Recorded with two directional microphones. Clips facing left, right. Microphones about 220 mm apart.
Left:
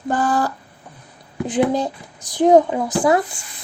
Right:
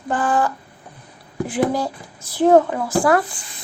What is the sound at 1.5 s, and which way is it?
Speech, 20° left (ahead or behind).